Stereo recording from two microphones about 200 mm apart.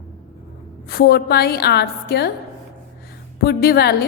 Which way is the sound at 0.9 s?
50° left (ahead or behind).